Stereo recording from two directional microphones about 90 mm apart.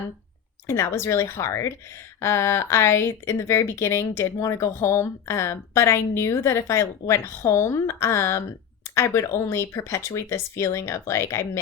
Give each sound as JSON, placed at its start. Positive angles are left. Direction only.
{"t": 0.7, "sound": "speech", "side_deg": 30}